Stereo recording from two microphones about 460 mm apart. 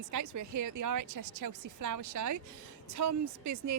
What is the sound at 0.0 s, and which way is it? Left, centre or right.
A woman's voice, right.